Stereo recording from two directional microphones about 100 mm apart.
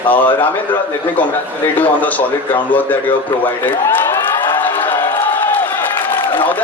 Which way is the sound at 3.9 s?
25° left (ahead or behind).